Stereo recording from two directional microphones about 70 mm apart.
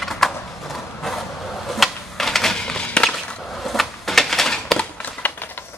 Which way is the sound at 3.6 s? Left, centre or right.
Centre.